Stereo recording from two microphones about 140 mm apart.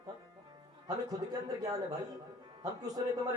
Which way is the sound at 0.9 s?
25° right (ahead or behind).